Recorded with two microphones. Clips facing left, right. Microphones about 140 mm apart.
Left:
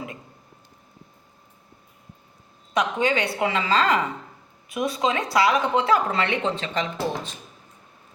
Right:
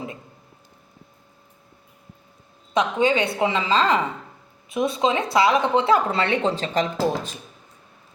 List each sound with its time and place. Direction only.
2.7 s speech: 25° right (ahead or behind)